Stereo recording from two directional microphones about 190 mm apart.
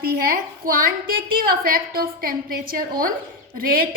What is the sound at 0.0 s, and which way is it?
A woman's voice, 50° right (ahead or behind).